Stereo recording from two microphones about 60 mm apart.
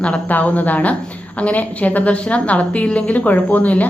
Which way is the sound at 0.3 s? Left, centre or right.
Left.